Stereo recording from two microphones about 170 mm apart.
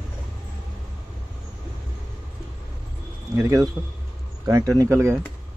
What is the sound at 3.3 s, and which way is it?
A man's voice, 20° right (ahead or behind).